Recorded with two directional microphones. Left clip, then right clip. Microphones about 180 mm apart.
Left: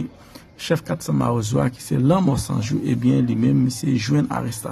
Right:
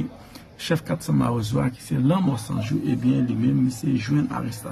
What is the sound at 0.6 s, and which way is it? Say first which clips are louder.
A man's voice: left 3 dB; 25° left (ahead or behind).